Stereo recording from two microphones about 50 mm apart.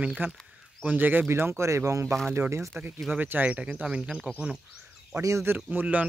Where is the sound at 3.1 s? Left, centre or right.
Right.